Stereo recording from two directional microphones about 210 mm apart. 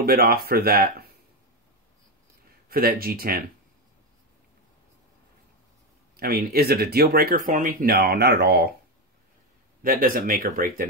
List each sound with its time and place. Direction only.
0.0 s speech: 45° right (ahead or behind)
2.7 s speech: 45° right (ahead or behind)
6.1 s speech: 45° right (ahead or behind)
9.8 s speech: 45° right (ahead or behind)